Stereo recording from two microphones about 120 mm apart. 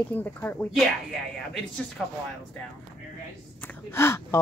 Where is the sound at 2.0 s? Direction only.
Centre (ahead or behind).